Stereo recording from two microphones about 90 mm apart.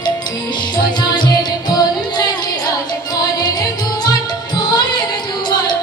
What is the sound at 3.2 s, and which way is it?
Music, 50° left (ahead or behind).